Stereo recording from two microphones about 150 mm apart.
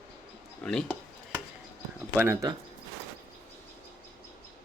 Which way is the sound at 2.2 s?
15° right (ahead or behind).